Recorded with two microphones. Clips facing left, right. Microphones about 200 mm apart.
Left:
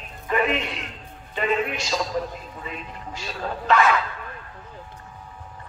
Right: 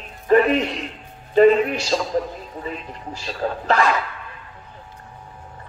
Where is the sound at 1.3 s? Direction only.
40° right (ahead or behind).